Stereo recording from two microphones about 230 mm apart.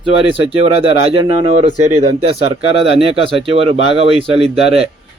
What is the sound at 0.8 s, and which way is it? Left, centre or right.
Speech, right.